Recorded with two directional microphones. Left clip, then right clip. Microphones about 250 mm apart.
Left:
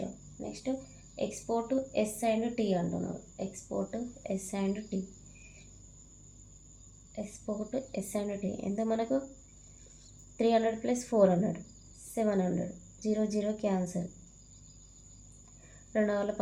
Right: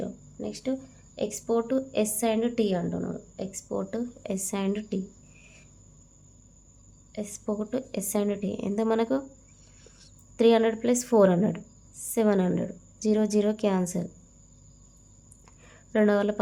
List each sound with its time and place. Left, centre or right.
1.1 s a woman's voice: right
7.2 s a woman's voice: right
10.3 s a woman's voice: right
15.9 s a woman's voice: right